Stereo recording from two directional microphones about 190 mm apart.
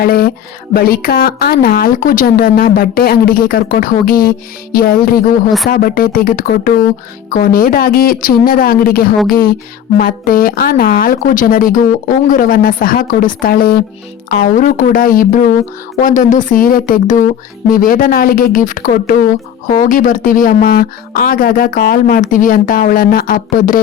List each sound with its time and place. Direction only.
0.0 s speech: 50° left (ahead or behind)